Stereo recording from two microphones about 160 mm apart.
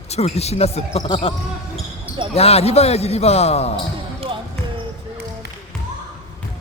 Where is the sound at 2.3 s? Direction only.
40° left (ahead or behind).